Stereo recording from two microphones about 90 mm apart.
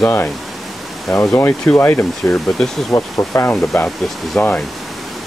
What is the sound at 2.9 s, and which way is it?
Speech, 35° left (ahead or behind).